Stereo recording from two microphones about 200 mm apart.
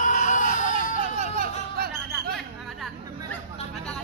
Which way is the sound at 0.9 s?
30° right (ahead or behind).